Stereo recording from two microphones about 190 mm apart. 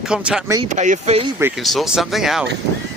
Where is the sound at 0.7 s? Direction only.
40° right (ahead or behind).